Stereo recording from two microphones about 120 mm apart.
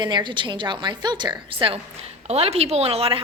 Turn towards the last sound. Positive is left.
turn(degrees=-50)  # may be behind; listen again after turning